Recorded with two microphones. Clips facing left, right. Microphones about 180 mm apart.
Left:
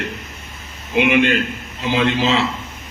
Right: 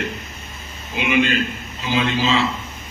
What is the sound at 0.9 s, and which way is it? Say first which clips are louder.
Speech: left 4 dB; 65° left (ahead or behind).